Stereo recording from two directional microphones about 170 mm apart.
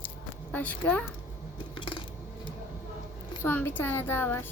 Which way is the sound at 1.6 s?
30° left (ahead or behind).